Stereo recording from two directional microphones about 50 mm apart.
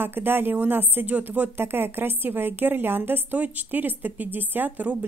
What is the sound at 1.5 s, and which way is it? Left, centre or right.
A woman's voice, right.